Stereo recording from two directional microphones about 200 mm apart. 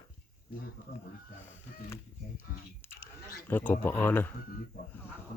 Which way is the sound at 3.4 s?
10° left (ahead or behind).